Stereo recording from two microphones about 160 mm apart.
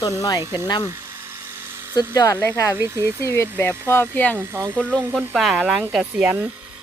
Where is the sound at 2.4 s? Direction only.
20° left (ahead or behind).